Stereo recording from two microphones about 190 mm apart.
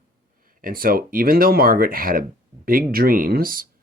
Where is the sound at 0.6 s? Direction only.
50° right (ahead or behind).